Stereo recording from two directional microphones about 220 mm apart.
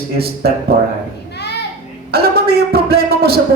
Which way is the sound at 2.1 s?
45° right (ahead or behind).